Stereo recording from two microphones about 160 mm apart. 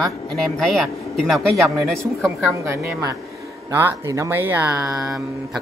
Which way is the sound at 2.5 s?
15° right (ahead or behind).